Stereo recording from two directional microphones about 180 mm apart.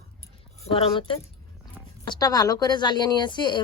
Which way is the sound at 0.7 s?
30° left (ahead or behind).